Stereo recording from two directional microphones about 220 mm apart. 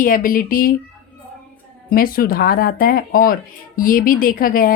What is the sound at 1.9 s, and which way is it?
Speech, 40° left (ahead or behind).